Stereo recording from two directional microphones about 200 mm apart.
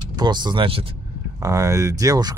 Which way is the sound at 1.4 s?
15° right (ahead or behind).